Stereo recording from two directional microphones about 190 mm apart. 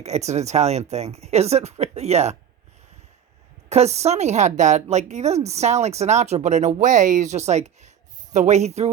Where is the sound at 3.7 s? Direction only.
35° right (ahead or behind).